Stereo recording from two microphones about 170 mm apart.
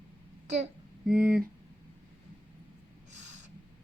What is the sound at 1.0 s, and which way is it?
Speech, 5° right (ahead or behind).